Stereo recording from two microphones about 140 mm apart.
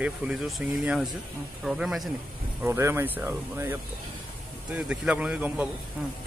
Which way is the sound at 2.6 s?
20° right (ahead or behind).